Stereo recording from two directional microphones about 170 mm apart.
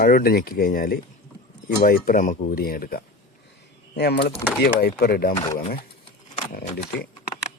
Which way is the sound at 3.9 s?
75° left (ahead or behind).